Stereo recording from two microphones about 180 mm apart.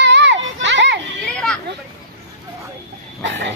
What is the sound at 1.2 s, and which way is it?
Children playing, 5° left (ahead or behind).